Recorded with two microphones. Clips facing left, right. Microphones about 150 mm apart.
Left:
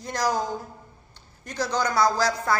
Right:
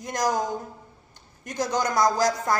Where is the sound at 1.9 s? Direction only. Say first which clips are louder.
Right 1 dB; 20° right (ahead or behind).